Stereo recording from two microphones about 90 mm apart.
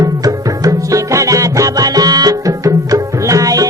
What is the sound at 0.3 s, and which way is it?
Music, 40° right (ahead or behind).